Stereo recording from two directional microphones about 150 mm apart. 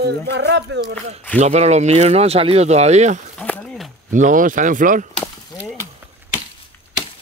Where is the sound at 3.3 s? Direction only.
10° left (ahead or behind).